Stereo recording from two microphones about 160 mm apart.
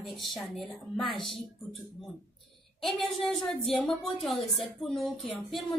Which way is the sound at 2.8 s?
Centre (ahead or behind).